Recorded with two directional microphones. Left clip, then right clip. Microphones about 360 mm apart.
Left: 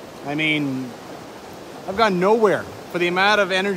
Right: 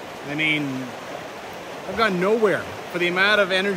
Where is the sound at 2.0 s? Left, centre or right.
Centre.